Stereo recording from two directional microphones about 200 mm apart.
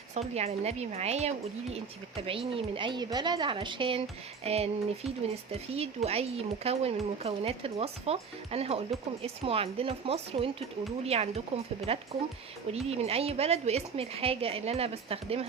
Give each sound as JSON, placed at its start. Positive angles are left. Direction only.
{"t": 0.1, "sound": "speech", "side_deg": -30}